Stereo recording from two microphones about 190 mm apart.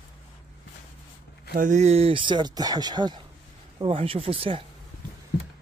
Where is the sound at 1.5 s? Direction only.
40° right (ahead or behind).